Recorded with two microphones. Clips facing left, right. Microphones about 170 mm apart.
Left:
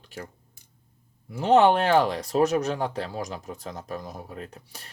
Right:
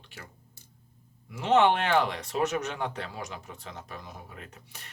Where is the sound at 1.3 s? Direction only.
35° left (ahead or behind).